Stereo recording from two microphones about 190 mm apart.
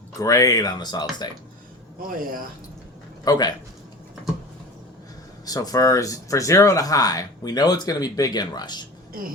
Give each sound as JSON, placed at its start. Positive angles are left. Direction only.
{"t": 0.2, "sound": "speech", "side_deg": 15}
{"t": 2.1, "sound": "speech", "side_deg": -45}
{"t": 3.2, "sound": "speech", "side_deg": 20}
{"t": 5.5, "sound": "speech", "side_deg": 20}